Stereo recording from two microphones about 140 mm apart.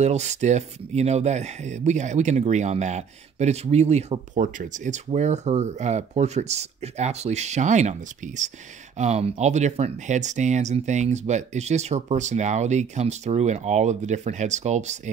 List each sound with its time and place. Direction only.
0.0 s speech: 55° right (ahead or behind)